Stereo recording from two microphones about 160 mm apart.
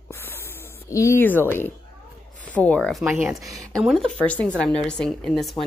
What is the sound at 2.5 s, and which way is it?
Speech, 10° left (ahead or behind).